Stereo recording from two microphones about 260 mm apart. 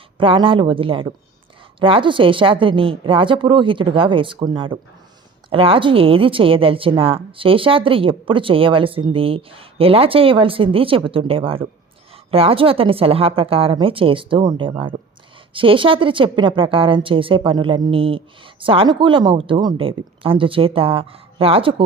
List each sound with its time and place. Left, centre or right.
0.2 s a woman's voice: centre